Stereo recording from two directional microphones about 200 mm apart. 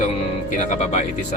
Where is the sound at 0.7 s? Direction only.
35° left (ahead or behind).